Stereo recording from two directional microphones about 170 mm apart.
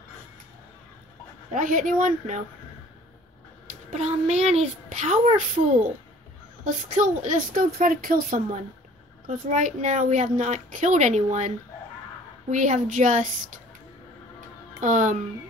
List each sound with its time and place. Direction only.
1.5 s speech: 50° right (ahead or behind)
3.9 s a child's voice: 40° right (ahead or behind)
14.8 s speech: 45° right (ahead or behind)